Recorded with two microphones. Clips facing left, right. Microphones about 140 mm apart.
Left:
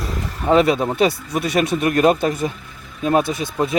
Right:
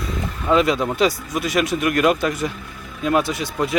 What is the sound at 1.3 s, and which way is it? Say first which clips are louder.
Speech: left 2 dB; 35° left (ahead or behind).